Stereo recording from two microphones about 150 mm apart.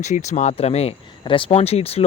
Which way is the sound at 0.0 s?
50° left (ahead or behind).